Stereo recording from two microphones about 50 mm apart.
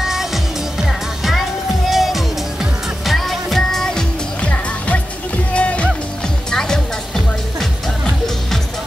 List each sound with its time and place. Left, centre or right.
0.0 s music: centre
1.9 s music: centre
4.4 s music: left
6.5 s music: centre